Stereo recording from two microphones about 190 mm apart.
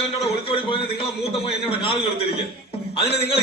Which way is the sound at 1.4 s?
30° left (ahead or behind).